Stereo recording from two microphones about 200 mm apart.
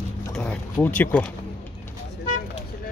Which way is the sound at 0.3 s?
5° left (ahead or behind).